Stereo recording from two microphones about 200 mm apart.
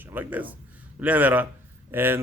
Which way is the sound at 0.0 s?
10° right (ahead or behind).